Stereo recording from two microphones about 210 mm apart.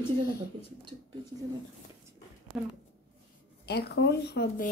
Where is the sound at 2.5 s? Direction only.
5° right (ahead or behind).